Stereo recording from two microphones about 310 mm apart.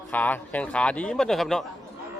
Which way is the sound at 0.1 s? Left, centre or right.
Centre.